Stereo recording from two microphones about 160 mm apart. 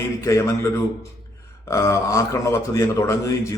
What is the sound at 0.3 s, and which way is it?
A man's voice, 20° left (ahead or behind).